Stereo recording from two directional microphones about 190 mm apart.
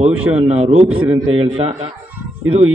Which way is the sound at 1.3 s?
30° right (ahead or behind).